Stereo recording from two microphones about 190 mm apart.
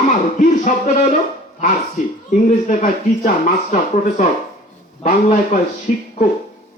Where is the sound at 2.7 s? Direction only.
40° left (ahead or behind).